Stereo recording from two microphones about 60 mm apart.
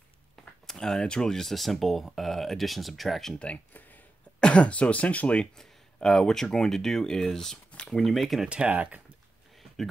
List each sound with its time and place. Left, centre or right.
0.7 s speech: centre
4.4 s speech: centre
5.6 s speech: centre
8.5 s speech: right